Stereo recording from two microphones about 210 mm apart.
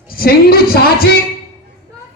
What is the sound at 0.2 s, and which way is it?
A man's voice, 45° left (ahead or behind).